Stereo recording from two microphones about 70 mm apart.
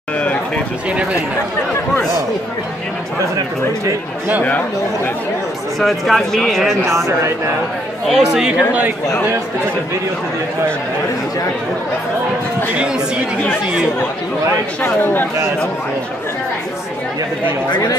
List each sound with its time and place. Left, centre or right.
5.8 s speech: centre
6.9 s speech: right
8.1 s speech: centre
14.8 s speech: left
17.6 s speech: left